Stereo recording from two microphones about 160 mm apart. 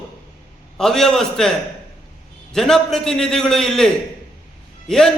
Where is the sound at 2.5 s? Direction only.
Centre (ahead or behind).